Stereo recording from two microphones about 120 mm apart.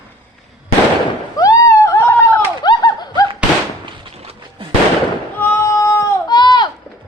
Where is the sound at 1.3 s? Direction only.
30° left (ahead or behind).